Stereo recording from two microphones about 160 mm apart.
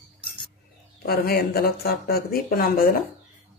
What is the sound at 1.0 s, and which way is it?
Speech, 70° left (ahead or behind).